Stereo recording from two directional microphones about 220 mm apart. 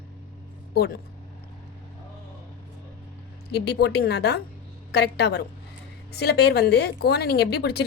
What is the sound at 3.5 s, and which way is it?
A woman's voice, 50° left (ahead or behind).